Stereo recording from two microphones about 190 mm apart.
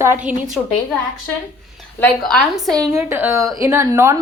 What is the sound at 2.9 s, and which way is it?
A woman's voice, 15° right (ahead or behind).